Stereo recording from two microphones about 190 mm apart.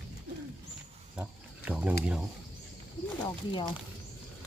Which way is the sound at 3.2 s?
20° left (ahead or behind).